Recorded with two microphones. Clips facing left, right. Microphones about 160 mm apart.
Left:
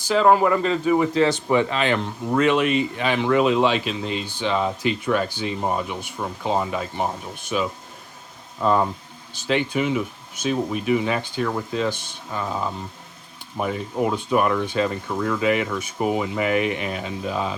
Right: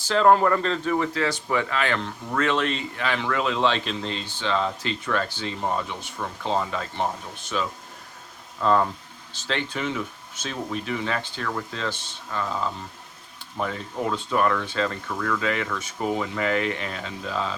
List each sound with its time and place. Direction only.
0.0 s speech: 5° left (ahead or behind)